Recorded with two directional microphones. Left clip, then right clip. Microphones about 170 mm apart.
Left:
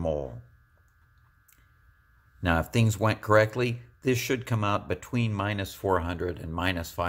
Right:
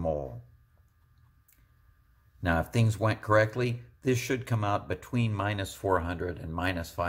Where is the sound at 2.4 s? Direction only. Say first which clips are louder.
Left 2 dB; 30° left (ahead or behind).